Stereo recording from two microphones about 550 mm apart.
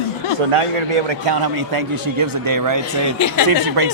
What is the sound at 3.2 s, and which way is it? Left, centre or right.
Speech, left.